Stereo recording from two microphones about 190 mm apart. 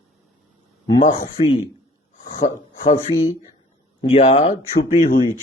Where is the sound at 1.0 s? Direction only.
35° left (ahead or behind).